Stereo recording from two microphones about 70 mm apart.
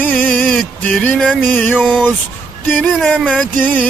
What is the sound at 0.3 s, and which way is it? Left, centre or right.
Music, centre.